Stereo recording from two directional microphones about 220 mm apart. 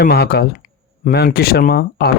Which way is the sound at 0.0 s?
45° left (ahead or behind).